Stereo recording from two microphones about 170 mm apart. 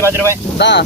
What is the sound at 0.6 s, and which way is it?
Speech, 90° left.